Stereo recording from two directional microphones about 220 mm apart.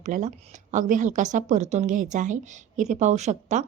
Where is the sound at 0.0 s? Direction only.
35° right (ahead or behind).